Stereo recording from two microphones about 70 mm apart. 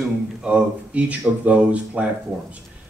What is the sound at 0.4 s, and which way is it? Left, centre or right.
A man's voice, centre.